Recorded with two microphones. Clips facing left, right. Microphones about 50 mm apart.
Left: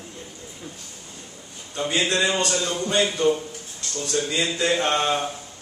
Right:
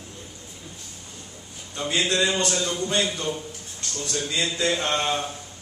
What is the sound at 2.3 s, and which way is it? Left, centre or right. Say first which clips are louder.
Speech: left 1 dB; centre.